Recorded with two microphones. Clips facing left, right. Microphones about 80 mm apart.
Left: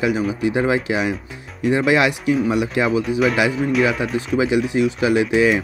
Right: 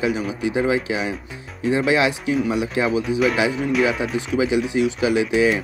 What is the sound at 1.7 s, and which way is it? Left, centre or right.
Speech, left.